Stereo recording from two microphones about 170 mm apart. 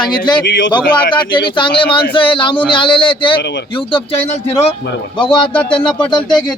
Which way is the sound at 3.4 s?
90° left.